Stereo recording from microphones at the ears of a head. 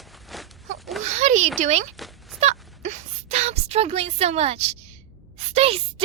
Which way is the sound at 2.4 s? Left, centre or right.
Right.